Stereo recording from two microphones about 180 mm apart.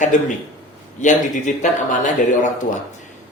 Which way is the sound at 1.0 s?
45° left (ahead or behind).